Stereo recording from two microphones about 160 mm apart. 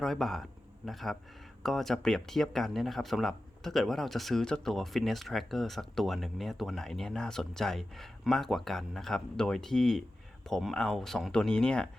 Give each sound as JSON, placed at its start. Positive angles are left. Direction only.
{"t": 0.0, "sound": "speech", "side_deg": 0}